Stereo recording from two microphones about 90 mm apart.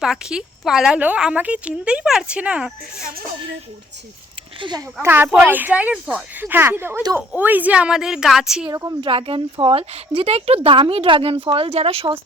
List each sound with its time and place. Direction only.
0.0 s a woman's voice: 5° right (ahead or behind)
0.9 s a woman's voice: 15° right (ahead or behind)
5.0 s a woman's voice: 25° right (ahead or behind); by 8.6 s 5° right (ahead or behind)
8.7 s a woman's voice: 40° right (ahead or behind)
9.0 s speech: 85° right